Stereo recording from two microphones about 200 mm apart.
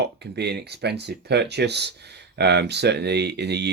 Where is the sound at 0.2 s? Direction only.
55° right (ahead or behind).